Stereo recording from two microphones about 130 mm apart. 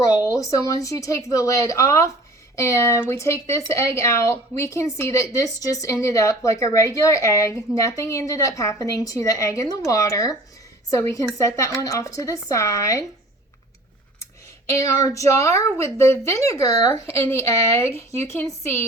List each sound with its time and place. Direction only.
0.0 s speech: 25° left (ahead or behind)
14.7 s speech: 25° left (ahead or behind)